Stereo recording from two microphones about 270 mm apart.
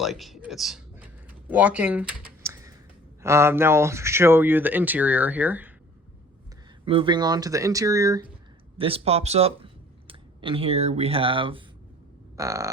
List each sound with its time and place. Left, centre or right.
0.0 s a sound: centre
3.2 s speech: centre
6.8 s speech: centre